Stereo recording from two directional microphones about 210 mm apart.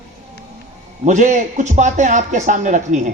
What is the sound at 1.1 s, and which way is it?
A man's voice, 35° right (ahead or behind).